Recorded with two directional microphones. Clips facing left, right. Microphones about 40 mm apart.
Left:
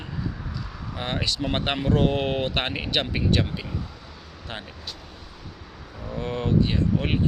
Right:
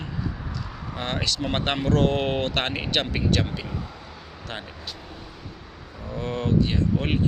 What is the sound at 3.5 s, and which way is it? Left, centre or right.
Speech, centre.